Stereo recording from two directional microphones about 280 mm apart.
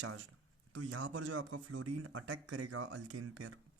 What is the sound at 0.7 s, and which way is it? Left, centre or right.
Speech, right.